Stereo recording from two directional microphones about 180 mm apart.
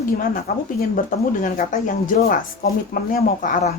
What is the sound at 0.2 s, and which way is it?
Speech, 55° left (ahead or behind).